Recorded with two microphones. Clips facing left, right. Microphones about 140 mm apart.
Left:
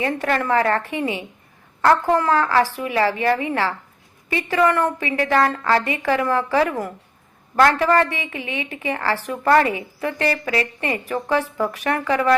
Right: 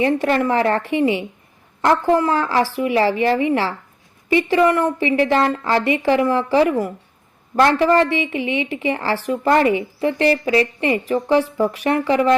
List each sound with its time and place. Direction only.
0.0 s a woman's voice: 25° right (ahead or behind)